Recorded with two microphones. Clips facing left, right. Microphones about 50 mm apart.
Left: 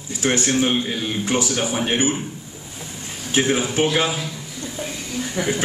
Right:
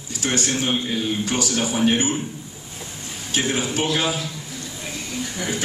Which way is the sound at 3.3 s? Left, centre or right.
Left.